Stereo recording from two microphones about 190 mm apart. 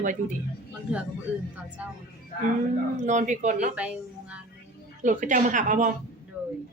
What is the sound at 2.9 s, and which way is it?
Speech, 40° right (ahead or behind).